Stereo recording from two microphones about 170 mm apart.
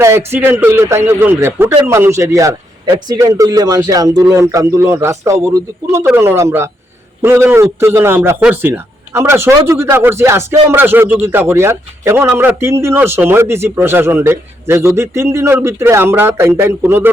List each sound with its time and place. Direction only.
0.0 s a man's voice: 15° right (ahead or behind)